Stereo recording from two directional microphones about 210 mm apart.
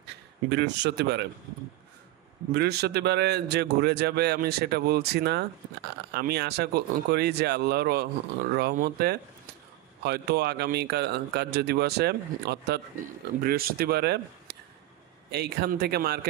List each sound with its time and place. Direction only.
0.5 s a man's voice: 55° right (ahead or behind)
2.5 s a man's voice: 50° right (ahead or behind)